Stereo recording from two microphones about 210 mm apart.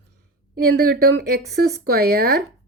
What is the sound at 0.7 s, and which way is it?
Speech, 50° right (ahead or behind).